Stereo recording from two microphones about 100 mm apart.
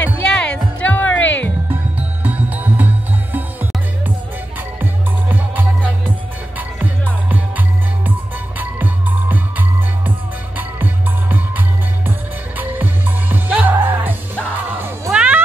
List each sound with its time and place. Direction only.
0.2 s music: 10° left (ahead or behind)
1.7 s music: 15° right (ahead or behind)
5.3 s music: 15° right (ahead or behind)
7.2 s music: 15° right (ahead or behind)